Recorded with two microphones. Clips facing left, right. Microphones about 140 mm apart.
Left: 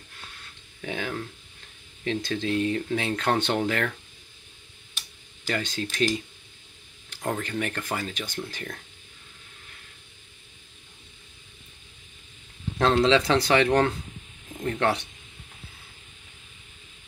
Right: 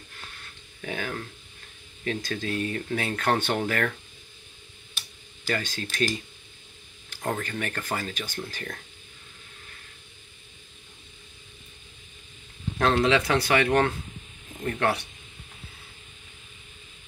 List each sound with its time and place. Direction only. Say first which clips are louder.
0.8 s speech: left 1 dB; 15° left (ahead or behind)
5.5 s speech: left 1 dB; 20° left (ahead or behind)
7.2 s speech: left 1 dB; 10° left (ahead or behind)
12.7 s speech: left 2 dB; 20° left (ahead or behind)